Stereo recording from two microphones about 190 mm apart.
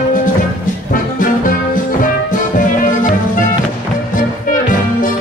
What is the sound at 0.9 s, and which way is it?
Music, 45° left (ahead or behind).